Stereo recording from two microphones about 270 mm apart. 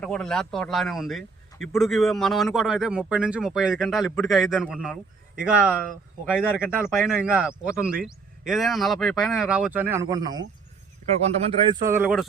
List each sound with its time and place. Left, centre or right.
0.0 s speech: centre